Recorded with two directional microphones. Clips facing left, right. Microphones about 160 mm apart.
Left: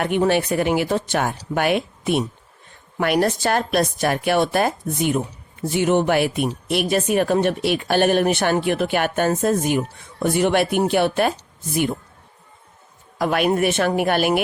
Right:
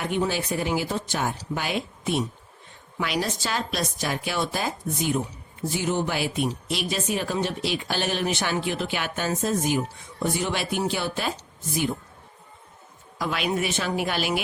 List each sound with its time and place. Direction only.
0.0 s speech: 65° left (ahead or behind)
13.1 s speech: 55° left (ahead or behind)